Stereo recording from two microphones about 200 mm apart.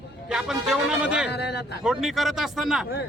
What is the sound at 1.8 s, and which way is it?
Speech, centre (ahead or behind).